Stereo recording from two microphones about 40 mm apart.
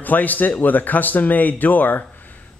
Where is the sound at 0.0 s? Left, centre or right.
Left.